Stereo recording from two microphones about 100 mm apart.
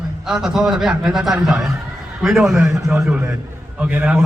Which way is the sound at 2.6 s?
30° right (ahead or behind).